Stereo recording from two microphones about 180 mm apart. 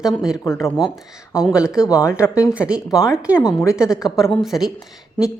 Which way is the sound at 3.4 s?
15° left (ahead or behind).